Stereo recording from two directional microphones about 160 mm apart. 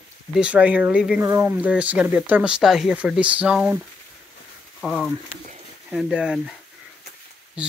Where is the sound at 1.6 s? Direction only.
10° right (ahead or behind).